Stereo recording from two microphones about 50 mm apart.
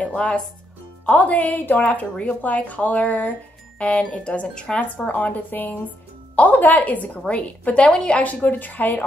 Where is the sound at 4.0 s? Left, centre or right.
Left.